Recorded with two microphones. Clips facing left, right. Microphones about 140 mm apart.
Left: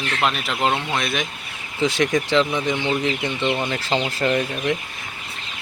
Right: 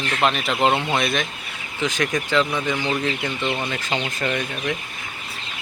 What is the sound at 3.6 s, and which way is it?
Speech, 30° left (ahead or behind).